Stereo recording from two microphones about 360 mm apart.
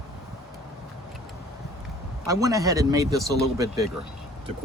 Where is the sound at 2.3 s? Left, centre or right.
Centre.